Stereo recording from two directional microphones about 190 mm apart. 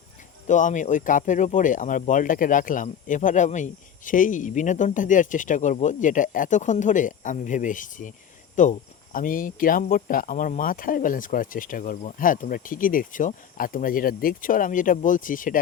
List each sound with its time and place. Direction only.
0.4 s speech: 40° left (ahead or behind)